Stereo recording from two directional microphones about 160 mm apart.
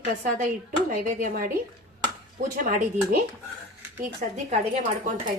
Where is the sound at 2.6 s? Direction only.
60° right (ahead or behind).